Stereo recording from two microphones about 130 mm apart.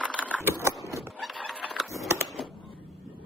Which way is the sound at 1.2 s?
Centre (ahead or behind).